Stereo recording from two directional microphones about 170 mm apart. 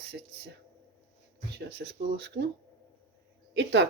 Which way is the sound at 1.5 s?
80° right.